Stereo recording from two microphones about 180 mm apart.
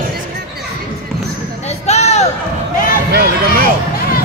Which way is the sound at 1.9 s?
40° left (ahead or behind).